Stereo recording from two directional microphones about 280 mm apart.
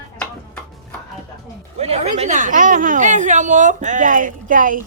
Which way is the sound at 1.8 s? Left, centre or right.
Right.